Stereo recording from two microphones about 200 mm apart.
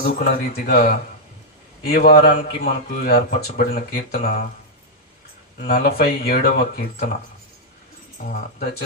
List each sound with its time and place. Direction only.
0.0 s a man's voice: 50° left (ahead or behind)
5.5 s a man's voice: 50° left (ahead or behind)
8.2 s a man's voice: 45° left (ahead or behind)